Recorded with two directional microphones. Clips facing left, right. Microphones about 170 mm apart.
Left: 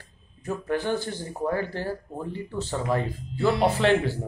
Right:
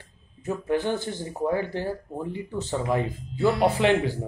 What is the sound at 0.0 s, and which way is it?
Speech, 20° right (ahead or behind).